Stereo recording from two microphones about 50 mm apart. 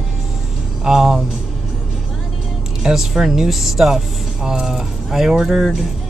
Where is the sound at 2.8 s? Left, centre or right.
Centre.